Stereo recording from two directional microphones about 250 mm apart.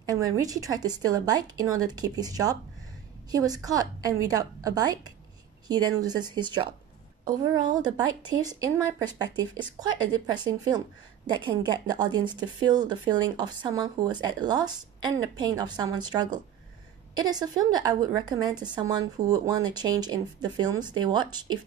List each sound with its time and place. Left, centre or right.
0.1 s a woman's voice: centre